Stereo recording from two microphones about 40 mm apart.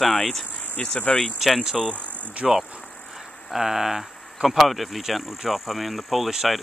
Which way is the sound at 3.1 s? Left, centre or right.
Centre.